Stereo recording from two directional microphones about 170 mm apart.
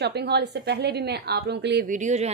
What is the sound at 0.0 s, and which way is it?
A woman's voice, 75° right (ahead or behind).